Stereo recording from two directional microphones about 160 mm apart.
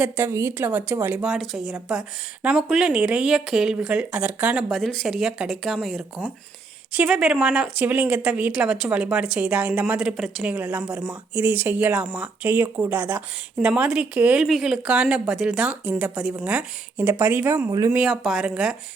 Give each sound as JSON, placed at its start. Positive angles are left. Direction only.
{"t": 0.0, "sound": "speech", "side_deg": -15}
{"t": 17.9, "sound": "speech", "side_deg": 0}